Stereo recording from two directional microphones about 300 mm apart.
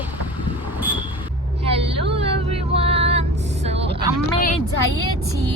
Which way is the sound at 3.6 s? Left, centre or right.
Centre.